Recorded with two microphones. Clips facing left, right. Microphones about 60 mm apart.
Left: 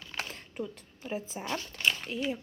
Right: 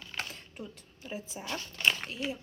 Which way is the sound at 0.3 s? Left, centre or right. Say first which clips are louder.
Left 6 dB; left.